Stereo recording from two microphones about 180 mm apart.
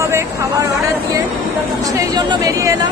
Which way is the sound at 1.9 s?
20° right (ahead or behind).